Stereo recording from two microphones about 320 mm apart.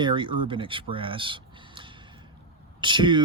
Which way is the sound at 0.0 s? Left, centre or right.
Centre.